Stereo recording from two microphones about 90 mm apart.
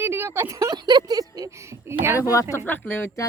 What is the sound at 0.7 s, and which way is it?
Speech, 50° right (ahead or behind).